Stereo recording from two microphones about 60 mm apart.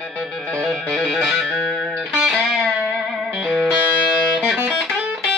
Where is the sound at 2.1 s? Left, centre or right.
Centre.